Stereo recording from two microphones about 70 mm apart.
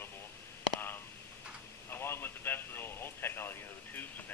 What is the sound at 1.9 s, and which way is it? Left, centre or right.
Radio, left.